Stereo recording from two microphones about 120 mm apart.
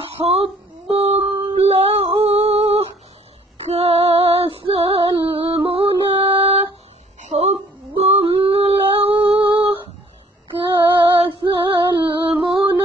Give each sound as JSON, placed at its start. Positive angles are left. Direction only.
{"t": 0.0, "sound": "female singing", "side_deg": -55}
{"t": 7.2, "sound": "a sound", "side_deg": -70}
{"t": 8.0, "sound": "female singing", "side_deg": -50}
{"t": 12.3, "sound": "music", "side_deg": -5}